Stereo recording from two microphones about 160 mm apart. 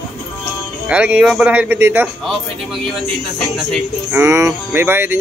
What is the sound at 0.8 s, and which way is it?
Speech, 10° right (ahead or behind).